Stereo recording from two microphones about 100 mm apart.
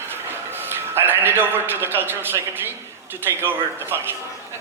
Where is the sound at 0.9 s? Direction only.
20° right (ahead or behind).